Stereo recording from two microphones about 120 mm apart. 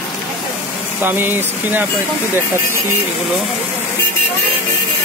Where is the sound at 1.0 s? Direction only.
15° right (ahead or behind).